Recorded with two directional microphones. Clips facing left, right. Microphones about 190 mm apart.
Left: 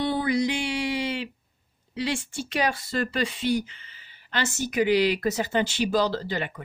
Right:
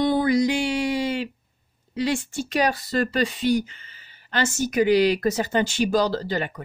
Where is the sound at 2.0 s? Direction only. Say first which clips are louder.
Right 4 dB; 45° right (ahead or behind).